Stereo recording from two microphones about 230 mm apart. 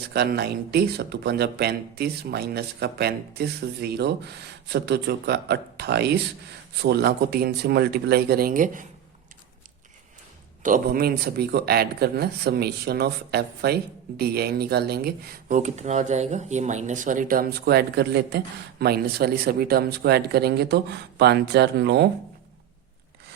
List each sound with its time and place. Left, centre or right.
0.1 s speech: right
10.6 s speech: right